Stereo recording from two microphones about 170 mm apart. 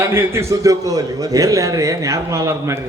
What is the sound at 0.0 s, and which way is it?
A man's voice, 15° right (ahead or behind).